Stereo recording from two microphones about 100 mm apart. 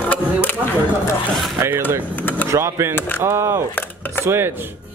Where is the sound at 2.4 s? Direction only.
30° right (ahead or behind).